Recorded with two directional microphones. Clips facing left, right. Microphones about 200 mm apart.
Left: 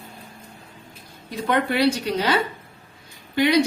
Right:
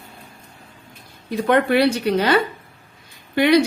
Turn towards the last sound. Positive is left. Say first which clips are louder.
# right 4 dB
turn(degrees=-60)  # may be behind; listen again after turning